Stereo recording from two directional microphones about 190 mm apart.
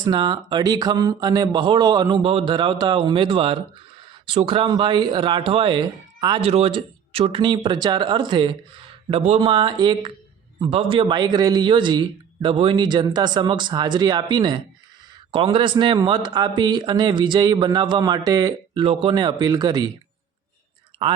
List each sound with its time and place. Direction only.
0.0 s speech: 25° right (ahead or behind)